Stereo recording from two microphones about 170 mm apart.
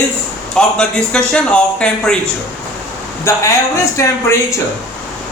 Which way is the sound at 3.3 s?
15° left (ahead or behind).